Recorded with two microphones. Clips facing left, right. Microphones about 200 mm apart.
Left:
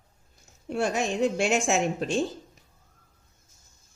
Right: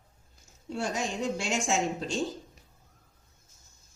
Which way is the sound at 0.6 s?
65° left (ahead or behind).